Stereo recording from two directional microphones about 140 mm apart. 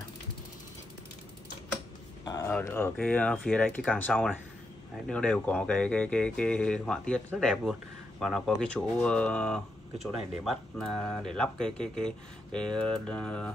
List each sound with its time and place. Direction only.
2.4 s speech: 15° left (ahead or behind)